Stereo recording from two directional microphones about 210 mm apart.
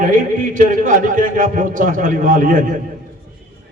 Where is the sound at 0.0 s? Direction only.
40° right (ahead or behind).